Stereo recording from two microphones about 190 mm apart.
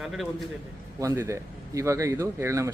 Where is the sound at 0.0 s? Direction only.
Centre (ahead or behind).